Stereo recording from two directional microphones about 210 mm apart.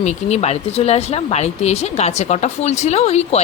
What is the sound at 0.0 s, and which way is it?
Speech, 30° left (ahead or behind).